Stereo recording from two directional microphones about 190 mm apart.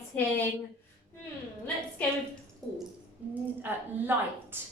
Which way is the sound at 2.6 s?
5° left (ahead or behind).